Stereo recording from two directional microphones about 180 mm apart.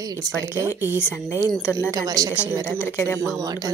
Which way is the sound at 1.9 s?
20° right (ahead or behind).